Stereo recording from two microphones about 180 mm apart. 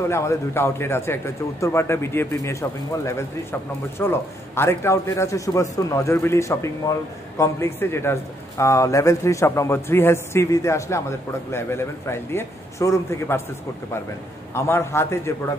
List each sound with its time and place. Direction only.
0.1 s a man's voice: 15° left (ahead or behind)
14.5 s a man's voice: 15° left (ahead or behind)